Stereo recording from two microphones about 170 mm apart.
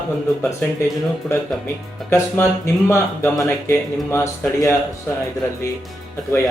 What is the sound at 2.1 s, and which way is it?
Speech, 15° left (ahead or behind).